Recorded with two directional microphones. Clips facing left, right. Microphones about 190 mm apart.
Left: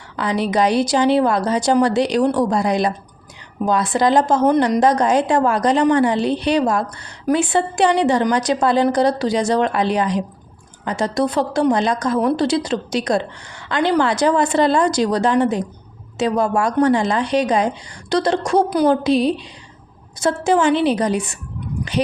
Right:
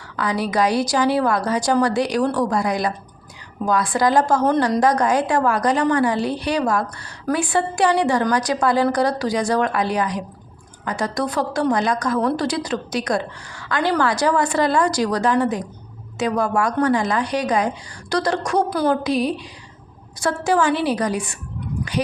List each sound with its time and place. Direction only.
0.2 s a woman's voice: 25° left (ahead or behind)